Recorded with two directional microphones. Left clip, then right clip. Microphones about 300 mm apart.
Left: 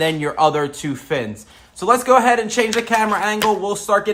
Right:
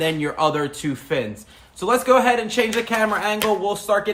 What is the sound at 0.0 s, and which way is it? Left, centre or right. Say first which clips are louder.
Speech: left 4 dB; left.